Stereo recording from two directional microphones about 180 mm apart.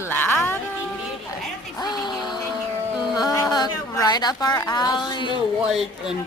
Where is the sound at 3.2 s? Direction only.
20° left (ahead or behind).